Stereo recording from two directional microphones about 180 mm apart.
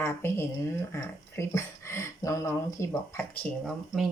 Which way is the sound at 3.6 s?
Centre (ahead or behind).